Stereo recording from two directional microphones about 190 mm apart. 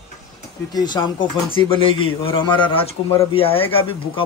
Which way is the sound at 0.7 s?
20° left (ahead or behind).